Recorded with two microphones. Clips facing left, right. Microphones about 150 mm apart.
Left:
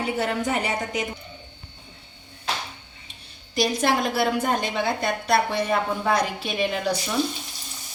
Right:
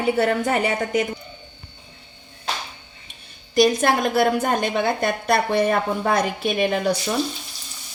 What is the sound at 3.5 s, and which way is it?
A woman's voice, 50° right (ahead or behind).